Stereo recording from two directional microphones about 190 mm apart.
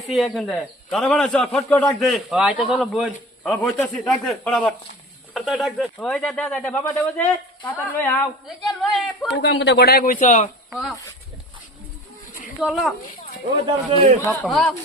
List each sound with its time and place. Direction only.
0.1 s a man's voice: centre (ahead or behind)
9.4 s speech: 65° left (ahead or behind); by 10.5 s 40° left (ahead or behind)
10.7 s speech: centre (ahead or behind)
12.5 s a man's voice: centre (ahead or behind)
13.9 s a man's voice: 35° right (ahead or behind)
14.4 s a man's voice: centre (ahead or behind)